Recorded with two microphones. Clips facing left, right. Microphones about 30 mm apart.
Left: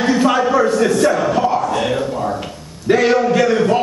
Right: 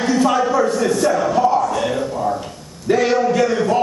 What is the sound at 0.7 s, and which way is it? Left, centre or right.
A man's voice, left.